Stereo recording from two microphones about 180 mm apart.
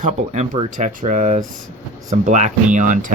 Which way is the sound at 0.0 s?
40° right (ahead or behind).